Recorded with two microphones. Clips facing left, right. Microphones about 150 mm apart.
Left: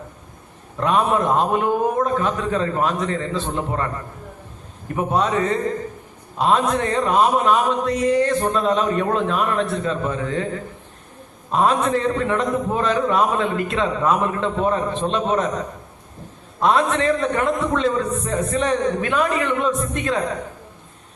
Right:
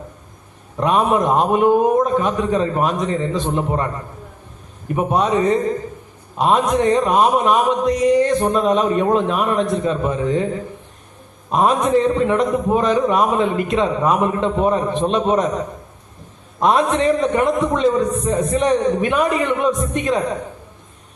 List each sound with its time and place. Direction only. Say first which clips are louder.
0.8 s speech: right 2 dB; 15° right (ahead or behind)
4.9 s speech: right 3 dB; 15° right (ahead or behind)
11.5 s speech: right 3 dB; 15° right (ahead or behind)
16.6 s speech: right 2 dB; 15° right (ahead or behind)